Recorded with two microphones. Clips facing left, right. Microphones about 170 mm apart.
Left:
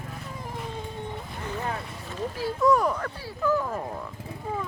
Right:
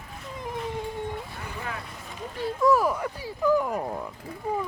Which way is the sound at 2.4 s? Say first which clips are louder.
Right 1 dB; centre (ahead or behind).